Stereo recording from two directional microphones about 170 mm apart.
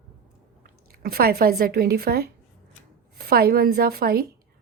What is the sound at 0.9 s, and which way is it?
Speech, 60° right (ahead or behind).